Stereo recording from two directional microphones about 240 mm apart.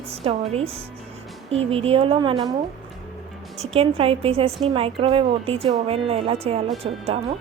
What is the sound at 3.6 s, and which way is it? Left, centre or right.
A woman's voice, right.